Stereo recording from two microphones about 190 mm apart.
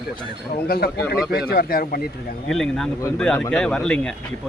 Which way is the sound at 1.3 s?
55° left (ahead or behind).